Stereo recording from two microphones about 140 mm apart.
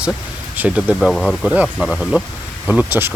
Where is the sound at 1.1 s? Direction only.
5° left (ahead or behind).